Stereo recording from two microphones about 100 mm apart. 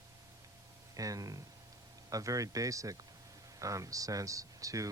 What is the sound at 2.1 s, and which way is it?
Speech, 35° right (ahead or behind).